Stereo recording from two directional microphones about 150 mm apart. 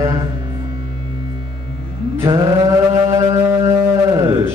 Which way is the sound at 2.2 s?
25° right (ahead or behind).